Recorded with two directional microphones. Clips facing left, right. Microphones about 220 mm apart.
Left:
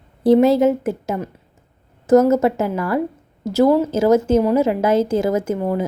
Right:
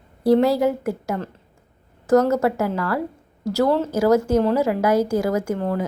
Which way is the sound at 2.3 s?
20° left (ahead or behind).